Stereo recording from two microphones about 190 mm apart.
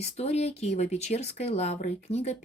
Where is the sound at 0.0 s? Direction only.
35° left (ahead or behind).